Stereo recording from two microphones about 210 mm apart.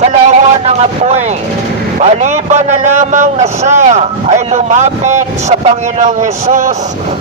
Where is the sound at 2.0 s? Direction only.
35° right (ahead or behind).